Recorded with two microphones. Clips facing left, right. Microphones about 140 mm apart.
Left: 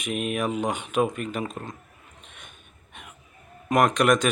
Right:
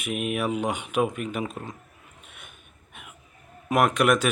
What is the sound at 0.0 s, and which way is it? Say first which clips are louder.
Speech: even; 5° right (ahead or behind).